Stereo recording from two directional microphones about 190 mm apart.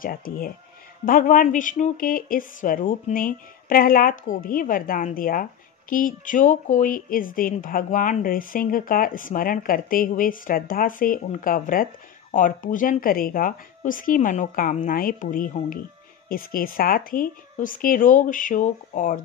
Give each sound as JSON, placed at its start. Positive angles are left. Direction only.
{"t": 0.0, "sound": "speech", "side_deg": 50}